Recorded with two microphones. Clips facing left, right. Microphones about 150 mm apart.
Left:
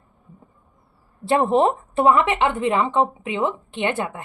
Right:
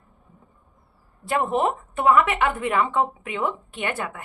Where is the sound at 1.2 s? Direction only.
30° left (ahead or behind).